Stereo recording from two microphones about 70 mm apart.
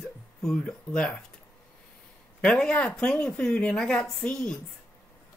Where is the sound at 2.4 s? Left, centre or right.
Centre.